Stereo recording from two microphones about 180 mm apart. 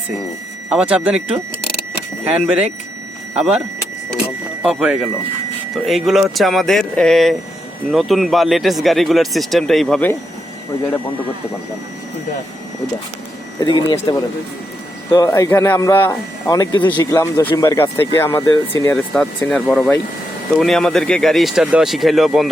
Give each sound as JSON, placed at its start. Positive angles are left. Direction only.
{"t": 0.7, "sound": "speech", "side_deg": -5}
{"t": 4.6, "sound": "speech", "side_deg": -5}
{"t": 13.9, "sound": "speech", "side_deg": 25}